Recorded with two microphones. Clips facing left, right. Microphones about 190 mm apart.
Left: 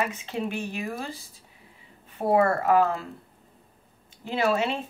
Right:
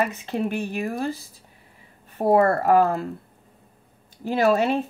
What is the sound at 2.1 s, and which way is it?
Speech, 40° right (ahead or behind).